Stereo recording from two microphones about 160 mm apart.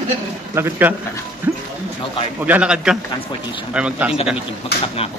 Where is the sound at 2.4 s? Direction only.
10° right (ahead or behind).